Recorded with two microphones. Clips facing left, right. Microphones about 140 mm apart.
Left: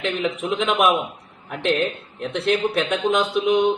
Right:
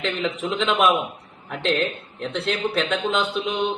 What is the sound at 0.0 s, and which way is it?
Mantra, 15° left (ahead or behind).